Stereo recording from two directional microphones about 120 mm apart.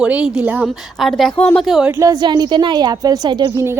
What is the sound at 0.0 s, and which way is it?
A woman's voice, 10° right (ahead or behind).